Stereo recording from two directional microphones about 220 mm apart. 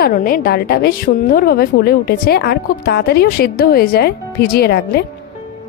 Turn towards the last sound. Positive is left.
turn(degrees=45)  # may be behind; listen again after turning